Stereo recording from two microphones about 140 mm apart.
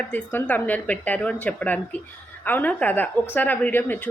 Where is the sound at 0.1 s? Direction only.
10° left (ahead or behind).